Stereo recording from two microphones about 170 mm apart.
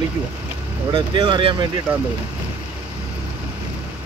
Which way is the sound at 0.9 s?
30° right (ahead or behind).